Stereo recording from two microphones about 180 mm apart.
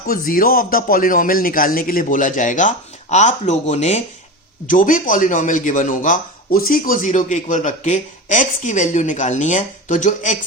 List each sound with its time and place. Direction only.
0.1 s speech: 50° left (ahead or behind)